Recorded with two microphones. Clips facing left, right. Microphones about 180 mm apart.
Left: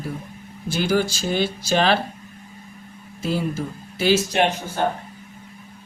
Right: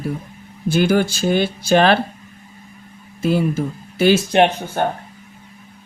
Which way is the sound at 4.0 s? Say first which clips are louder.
Right 5 dB; 60° right (ahead or behind).